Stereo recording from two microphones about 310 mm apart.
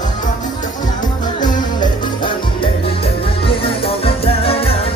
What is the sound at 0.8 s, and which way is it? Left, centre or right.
Music, centre.